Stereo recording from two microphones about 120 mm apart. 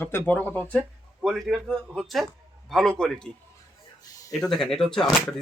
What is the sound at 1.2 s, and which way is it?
Speech, centre (ahead or behind).